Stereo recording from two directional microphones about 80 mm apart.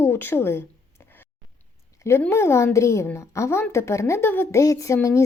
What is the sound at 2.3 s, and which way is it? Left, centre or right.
A woman's voice, left.